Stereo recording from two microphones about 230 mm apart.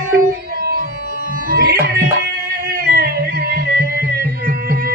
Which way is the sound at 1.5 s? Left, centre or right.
Right.